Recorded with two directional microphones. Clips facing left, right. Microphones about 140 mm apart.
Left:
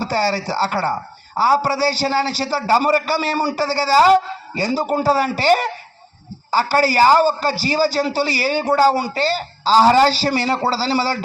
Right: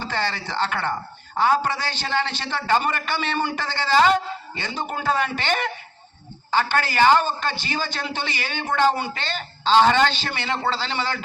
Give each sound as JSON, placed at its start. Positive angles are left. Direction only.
{"t": 0.0, "sound": "speech", "side_deg": 40}